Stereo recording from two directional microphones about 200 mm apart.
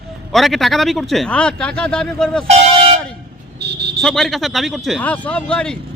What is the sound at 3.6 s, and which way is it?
Vehicle, 55° right (ahead or behind).